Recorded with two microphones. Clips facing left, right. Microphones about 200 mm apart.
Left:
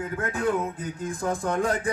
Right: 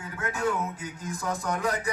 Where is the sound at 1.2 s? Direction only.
50° left (ahead or behind).